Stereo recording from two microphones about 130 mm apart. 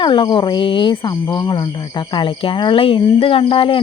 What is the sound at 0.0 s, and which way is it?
Speech, 40° left (ahead or behind).